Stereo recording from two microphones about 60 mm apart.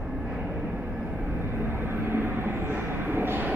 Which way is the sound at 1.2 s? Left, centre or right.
Right.